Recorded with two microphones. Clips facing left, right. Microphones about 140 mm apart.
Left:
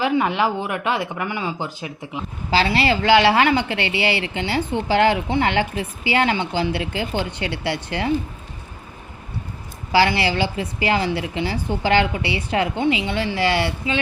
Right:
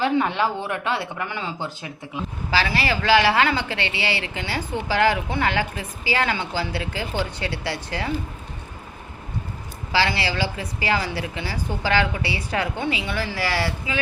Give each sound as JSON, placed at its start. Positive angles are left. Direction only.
{"t": 0.0, "sound": "a woman's voice", "side_deg": 15}
{"t": 3.7, "sound": "a woman's voice", "side_deg": -30}
{"t": 4.2, "sound": "a woman's voice", "side_deg": 25}
{"t": 7.3, "sound": "speech", "side_deg": -35}
{"t": 9.9, "sound": "a woman's voice", "side_deg": 30}